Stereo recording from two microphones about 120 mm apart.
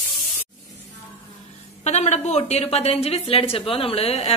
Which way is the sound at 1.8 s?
70° left (ahead or behind).